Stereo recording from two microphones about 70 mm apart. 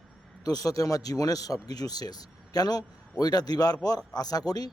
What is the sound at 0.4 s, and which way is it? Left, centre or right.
A man's voice, left.